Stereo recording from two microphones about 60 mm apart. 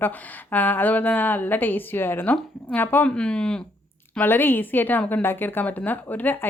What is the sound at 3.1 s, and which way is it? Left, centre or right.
Speech, centre.